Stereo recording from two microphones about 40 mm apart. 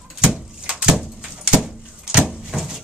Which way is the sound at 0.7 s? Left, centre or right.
Centre.